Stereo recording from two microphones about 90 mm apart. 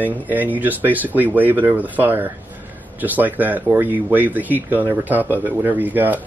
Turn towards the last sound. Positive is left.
turn(degrees=-20)  # may be behind; listen again after turning